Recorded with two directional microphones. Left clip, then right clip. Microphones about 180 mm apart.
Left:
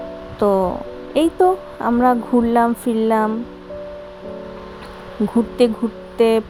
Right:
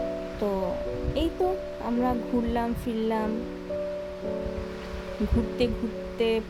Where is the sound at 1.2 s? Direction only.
30° left (ahead or behind).